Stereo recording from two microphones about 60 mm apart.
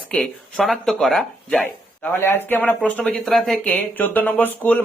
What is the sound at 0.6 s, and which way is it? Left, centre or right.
Speech, centre.